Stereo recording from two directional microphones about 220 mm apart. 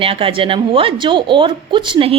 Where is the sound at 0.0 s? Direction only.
25° right (ahead or behind).